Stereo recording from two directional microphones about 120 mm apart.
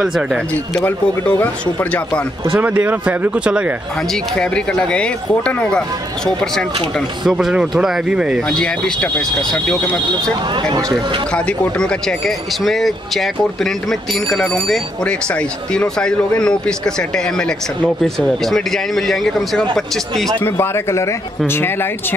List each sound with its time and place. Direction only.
0.0 s speech: centre (ahead or behind)
0.8 s speech: 15° left (ahead or behind)
2.6 s speech: 15° right (ahead or behind)
4.1 s speech: 5° left (ahead or behind)
8.5 s speech: 5° left (ahead or behind)
11.3 s speech: 10° left (ahead or behind)
20.3 s speech: 20° left (ahead or behind)